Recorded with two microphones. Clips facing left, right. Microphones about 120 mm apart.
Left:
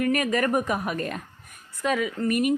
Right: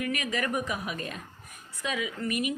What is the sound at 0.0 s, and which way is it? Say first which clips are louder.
A woman's voice: left 7 dB; 45° left (ahead or behind).